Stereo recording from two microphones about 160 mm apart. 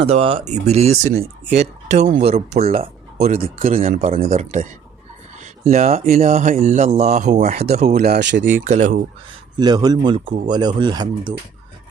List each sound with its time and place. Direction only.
0.0 s speech: 35° right (ahead or behind)
8.0 s speech: 90° right
8.6 s speech: 50° right (ahead or behind)
9.6 s speech: 25° right (ahead or behind)